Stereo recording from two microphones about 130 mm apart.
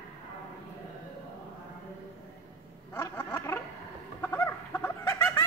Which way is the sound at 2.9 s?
15° left (ahead or behind).